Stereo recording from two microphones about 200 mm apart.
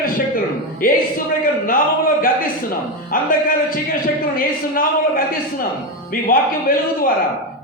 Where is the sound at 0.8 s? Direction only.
45° left (ahead or behind).